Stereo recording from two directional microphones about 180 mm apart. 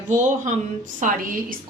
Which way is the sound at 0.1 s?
45° right (ahead or behind).